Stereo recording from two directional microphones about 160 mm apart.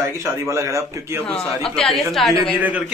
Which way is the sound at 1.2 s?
5° left (ahead or behind).